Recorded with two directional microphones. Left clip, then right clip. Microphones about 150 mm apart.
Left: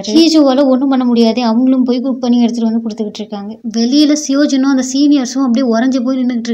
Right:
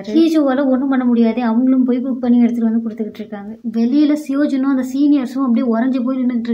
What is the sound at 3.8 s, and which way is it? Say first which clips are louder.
A woman's voice: left 4 dB; 20° left (ahead or behind).